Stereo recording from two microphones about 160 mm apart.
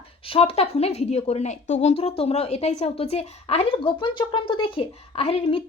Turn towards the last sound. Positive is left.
turn(degrees=35)  # may be behind; listen again after turning